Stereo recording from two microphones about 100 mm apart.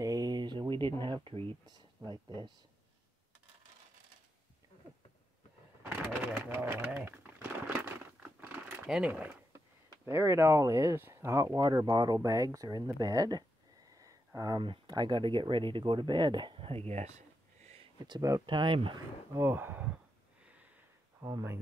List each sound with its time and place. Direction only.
0.0 s a sound: 35° right (ahead or behind); by 0.9 s 55° right (ahead or behind)
1.0 s speech: 60° right (ahead or behind)
2.0 s speech: 45° right (ahead or behind)
5.9 s bird: 15° right (ahead or behind)
8.4 s a sound: 15° right (ahead or behind)
8.9 s speech: 10° right (ahead or behind)
10.0 s speech: 25° right (ahead or behind)
13.9 s a sound: 35° right (ahead or behind)
14.6 s speech: 50° right (ahead or behind); by 17.2 s 90° right
17.9 s speech: 50° right (ahead or behind)
19.3 s speech: 20° right (ahead or behind)
21.2 s speech: 35° right (ahead or behind)